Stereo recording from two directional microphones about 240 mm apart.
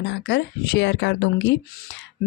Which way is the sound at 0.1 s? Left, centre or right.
Left.